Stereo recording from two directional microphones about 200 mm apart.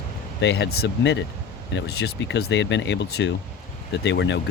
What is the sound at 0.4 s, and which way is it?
Speech, 60° left (ahead or behind).